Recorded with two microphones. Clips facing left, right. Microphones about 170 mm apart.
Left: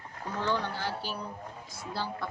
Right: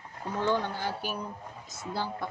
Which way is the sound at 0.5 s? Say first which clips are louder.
Right 2 dB; 15° right (ahead or behind).